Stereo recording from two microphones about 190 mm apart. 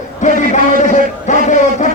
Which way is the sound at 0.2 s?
40° left (ahead or behind).